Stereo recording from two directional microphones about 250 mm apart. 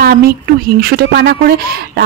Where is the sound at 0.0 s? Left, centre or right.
Right.